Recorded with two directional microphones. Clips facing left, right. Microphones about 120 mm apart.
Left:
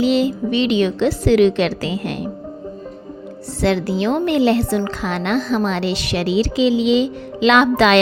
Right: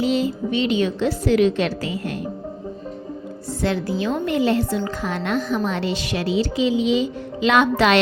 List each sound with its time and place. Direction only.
0.0 s a woman's voice: 80° left
3.6 s a woman's voice: 80° left
4.9 s a woman's voice: 85° left